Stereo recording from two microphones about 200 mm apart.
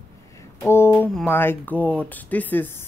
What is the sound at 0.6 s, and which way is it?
Speech, 10° left (ahead or behind).